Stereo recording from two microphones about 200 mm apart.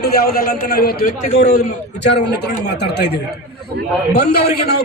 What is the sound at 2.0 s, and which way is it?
Speech, 55° left (ahead or behind).